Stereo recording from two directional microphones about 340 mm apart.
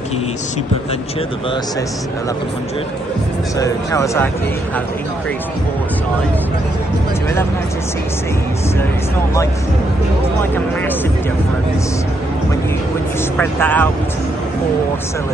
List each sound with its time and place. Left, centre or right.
3.5 s speech: centre
13.4 s speech: centre